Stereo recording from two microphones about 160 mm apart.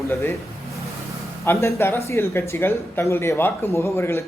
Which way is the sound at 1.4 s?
15° left (ahead or behind).